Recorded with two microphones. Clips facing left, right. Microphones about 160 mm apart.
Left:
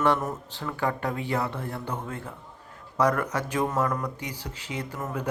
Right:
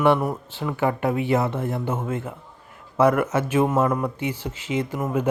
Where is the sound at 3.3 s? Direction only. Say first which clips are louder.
Right 6 dB; 20° right (ahead or behind).